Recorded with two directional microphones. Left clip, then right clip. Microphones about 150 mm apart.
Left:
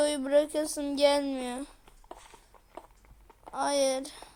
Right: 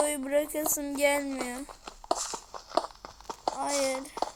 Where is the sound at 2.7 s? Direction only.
30° right (ahead or behind).